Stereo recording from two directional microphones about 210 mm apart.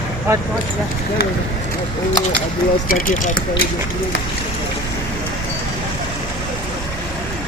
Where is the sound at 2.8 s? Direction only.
40° left (ahead or behind).